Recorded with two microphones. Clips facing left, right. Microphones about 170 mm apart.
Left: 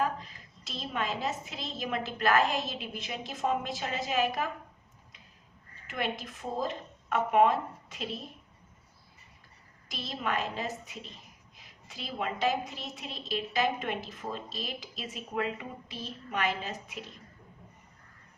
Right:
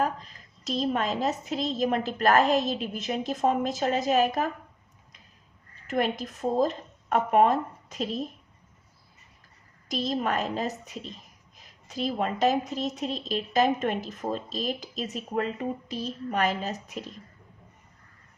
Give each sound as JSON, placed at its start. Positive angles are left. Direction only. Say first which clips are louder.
{"t": 0.0, "sound": "a woman's voice", "louder": "right 3 dB", "side_deg": -40}
{"t": 5.9, "sound": "a woman's voice", "louder": "right 7 dB", "side_deg": -45}
{"t": 9.9, "sound": "a woman's voice", "louder": "right 6 dB", "side_deg": -45}